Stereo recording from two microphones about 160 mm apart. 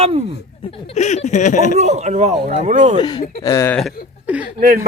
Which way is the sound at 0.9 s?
45° left (ahead or behind).